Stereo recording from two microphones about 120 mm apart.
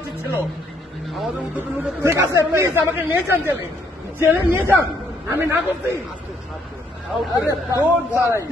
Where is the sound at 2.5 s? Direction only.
20° right (ahead or behind).